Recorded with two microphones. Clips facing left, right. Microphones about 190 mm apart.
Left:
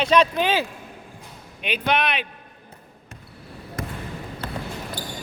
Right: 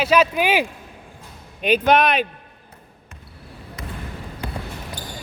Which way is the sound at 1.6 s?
40° right (ahead or behind).